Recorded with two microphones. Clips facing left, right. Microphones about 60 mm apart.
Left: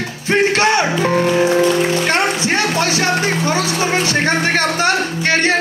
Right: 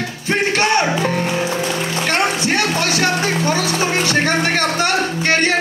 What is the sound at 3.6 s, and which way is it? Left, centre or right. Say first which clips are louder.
Music: even; right.